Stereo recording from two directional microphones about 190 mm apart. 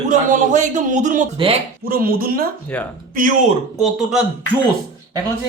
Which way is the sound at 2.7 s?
10° left (ahead or behind).